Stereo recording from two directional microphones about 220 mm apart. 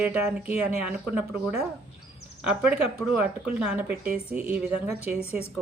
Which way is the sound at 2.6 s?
5° right (ahead or behind).